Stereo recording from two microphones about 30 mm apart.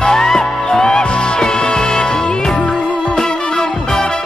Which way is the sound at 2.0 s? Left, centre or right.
Left.